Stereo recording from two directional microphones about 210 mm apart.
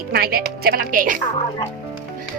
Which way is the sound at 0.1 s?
45° right (ahead or behind).